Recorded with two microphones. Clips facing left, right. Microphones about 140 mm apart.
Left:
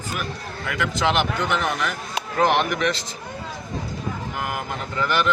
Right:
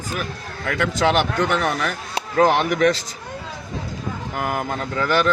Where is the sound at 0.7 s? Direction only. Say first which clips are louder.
Right 3 dB; 45° right (ahead or behind).